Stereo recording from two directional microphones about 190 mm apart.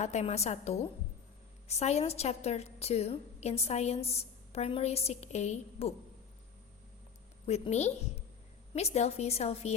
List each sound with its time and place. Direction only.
0.0 s a woman's voice: 35° left (ahead or behind)
7.4 s a woman's voice: 35° left (ahead or behind)